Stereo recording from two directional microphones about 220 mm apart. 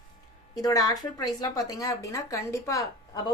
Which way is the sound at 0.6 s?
15° left (ahead or behind).